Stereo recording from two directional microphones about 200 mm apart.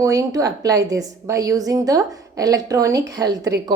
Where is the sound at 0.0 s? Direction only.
15° right (ahead or behind).